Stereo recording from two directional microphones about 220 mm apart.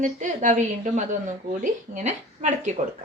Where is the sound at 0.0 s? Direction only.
35° right (ahead or behind).